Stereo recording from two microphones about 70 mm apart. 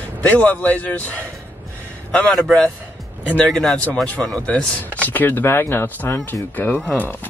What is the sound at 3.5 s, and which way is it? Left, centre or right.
Speech, centre.